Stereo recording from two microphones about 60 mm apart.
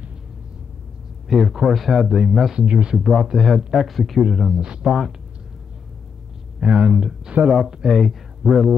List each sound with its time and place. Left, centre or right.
1.3 s speech: centre
2.5 s speech: centre
3.0 s speech: centre
4.6 s speech: centre
6.6 s speech: right; by 8.7 s centre